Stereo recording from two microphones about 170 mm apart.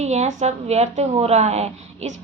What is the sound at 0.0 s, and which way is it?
A woman's voice, 40° right (ahead or behind).